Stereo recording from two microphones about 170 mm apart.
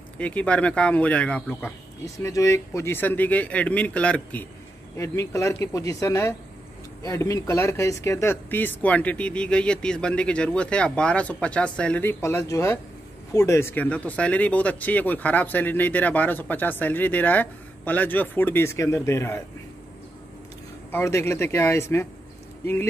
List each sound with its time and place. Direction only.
0.2 s speech: 10° left (ahead or behind)
2.1 s speech: 20° left (ahead or behind)
20.9 s speech: 15° left (ahead or behind)